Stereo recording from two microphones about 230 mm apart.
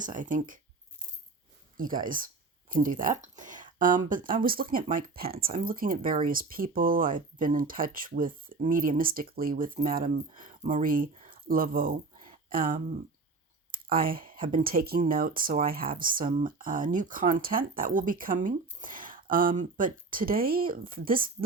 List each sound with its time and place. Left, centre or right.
0.0 s speech: right
1.7 s speech: right